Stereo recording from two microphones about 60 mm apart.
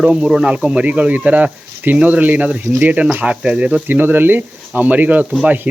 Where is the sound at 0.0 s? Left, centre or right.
Centre.